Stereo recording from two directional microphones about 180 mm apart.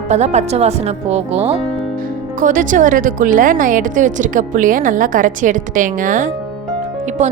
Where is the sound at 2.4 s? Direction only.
45° right (ahead or behind).